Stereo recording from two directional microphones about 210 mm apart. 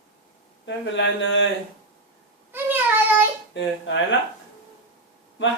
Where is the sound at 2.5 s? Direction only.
10° right (ahead or behind).